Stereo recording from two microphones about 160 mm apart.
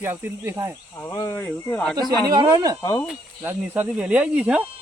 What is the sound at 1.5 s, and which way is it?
Speech, 5° left (ahead or behind).